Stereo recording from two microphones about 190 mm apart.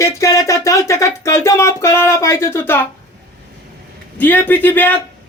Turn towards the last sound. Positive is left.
turn(degrees=10)  # may be behind; listen again after turning